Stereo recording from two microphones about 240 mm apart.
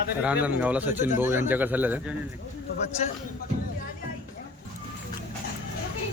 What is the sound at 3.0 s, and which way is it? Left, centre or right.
Speech, left.